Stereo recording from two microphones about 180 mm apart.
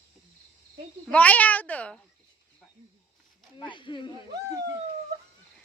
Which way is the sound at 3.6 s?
25° left (ahead or behind).